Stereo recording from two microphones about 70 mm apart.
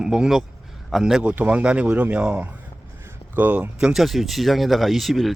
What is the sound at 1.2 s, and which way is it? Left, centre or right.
Speech, centre.